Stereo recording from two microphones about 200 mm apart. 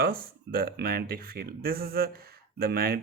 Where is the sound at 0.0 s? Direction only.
45° right (ahead or behind).